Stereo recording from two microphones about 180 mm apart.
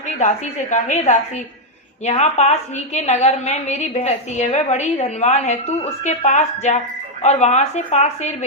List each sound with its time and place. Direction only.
0.2 s a woman's voice: 40° left (ahead or behind)